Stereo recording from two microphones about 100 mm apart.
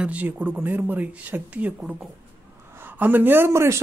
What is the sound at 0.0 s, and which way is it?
Speech, 15° right (ahead or behind).